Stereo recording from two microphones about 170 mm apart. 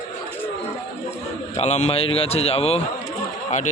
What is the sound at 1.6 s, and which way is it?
Speech, 40° left (ahead or behind).